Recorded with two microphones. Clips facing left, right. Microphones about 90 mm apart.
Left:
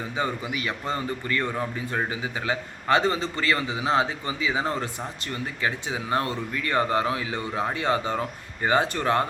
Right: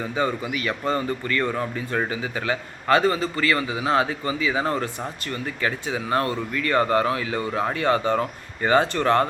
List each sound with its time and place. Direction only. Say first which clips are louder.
0.2 s a man's voice: right 3 dB; 20° left (ahead or behind)
6.1 s speech: right 3 dB; 20° left (ahead or behind)